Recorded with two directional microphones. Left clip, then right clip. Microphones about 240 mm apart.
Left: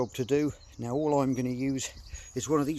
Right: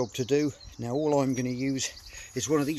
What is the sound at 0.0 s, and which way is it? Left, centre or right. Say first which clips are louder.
Speech: right 1 dB; centre.